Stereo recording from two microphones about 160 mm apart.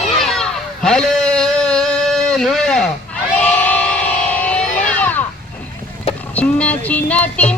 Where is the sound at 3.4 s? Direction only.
10° left (ahead or behind).